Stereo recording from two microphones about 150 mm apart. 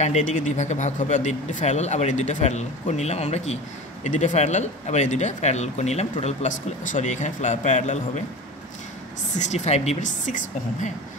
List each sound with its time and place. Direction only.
0.0 s speech: 50° left (ahead or behind)
9.4 s speech: 50° left (ahead or behind)